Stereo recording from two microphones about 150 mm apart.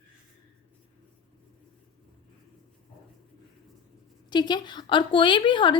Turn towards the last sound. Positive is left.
turn(degrees=30)  # may be behind; listen again after turning